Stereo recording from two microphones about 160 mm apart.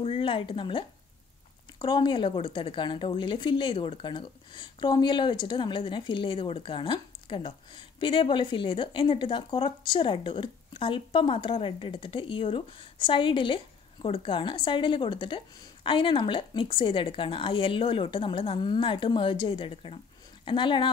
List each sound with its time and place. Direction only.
0.0 s a woman's voice: 35° left (ahead or behind)